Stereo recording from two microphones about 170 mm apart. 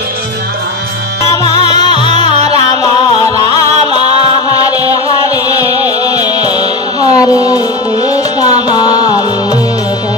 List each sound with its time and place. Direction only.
1.5 s music: 25° left (ahead or behind)
4.5 s music: 20° left (ahead or behind)